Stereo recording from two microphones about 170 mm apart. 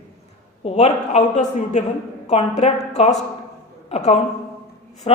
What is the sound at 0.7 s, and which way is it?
A woman's voice, 40° left (ahead or behind).